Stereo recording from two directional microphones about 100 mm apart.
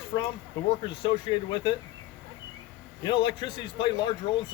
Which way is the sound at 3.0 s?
55° left (ahead or behind).